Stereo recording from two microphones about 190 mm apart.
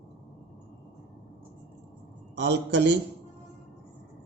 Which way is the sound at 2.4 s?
65° right (ahead or behind).